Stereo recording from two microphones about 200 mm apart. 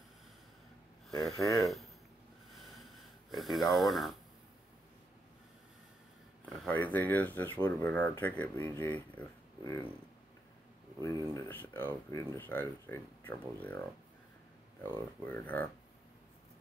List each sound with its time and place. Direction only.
1.3 s speech: 15° left (ahead or behind)
1.6 s speech: centre (ahead or behind)
2.5 s a sound: centre (ahead or behind)
6.4 s speech: centre (ahead or behind)
11.3 s speech: 10° left (ahead or behind)